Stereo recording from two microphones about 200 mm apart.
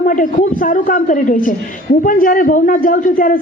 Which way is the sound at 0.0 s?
40° left (ahead or behind).